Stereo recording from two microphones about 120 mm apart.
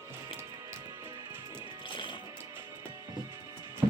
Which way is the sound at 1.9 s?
45° left (ahead or behind).